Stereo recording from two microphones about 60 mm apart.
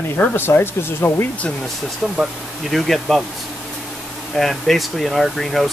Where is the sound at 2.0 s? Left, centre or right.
Centre.